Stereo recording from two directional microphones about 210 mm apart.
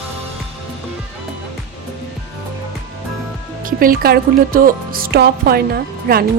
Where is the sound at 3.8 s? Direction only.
45° right (ahead or behind).